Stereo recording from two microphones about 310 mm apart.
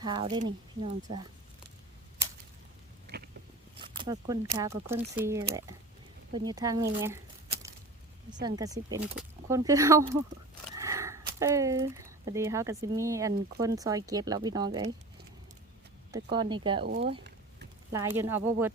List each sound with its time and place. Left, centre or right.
0.0 s speech: centre
3.1 s vehicle: right
3.8 s speech: centre
7.0 s a sound: centre
8.3 s speech: centre
16.1 s speech: centre
18.2 s speech: centre